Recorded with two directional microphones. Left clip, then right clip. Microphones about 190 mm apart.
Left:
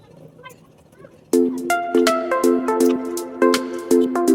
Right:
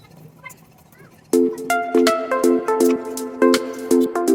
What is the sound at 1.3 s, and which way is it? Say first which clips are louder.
Music: even; centre (ahead or behind).